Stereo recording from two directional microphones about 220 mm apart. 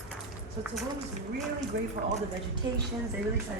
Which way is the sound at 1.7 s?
55° right (ahead or behind).